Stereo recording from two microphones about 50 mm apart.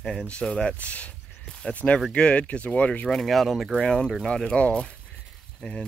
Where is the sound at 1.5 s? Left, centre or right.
Centre.